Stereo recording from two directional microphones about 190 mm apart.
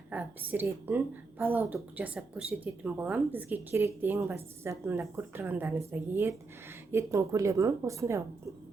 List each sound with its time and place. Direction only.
0.1 s a woman's voice: 10° right (ahead or behind)